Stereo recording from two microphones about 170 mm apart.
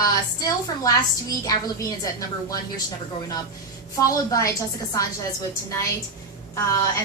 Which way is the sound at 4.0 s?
20° left (ahead or behind).